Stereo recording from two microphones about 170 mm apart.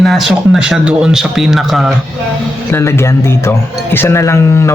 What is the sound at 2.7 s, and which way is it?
A man's voice, 15° left (ahead or behind).